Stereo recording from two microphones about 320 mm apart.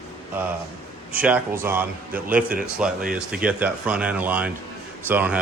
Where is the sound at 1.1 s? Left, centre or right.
Centre.